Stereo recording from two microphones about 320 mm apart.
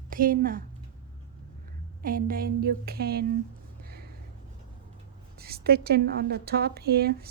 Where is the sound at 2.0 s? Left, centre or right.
Right.